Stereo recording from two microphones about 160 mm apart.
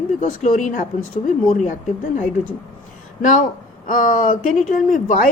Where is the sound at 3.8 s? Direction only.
60° left (ahead or behind).